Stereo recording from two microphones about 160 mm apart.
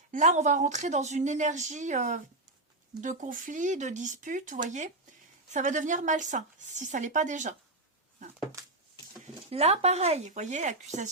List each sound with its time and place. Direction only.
0.1 s speech: 50° right (ahead or behind)
9.5 s speech: 40° right (ahead or behind)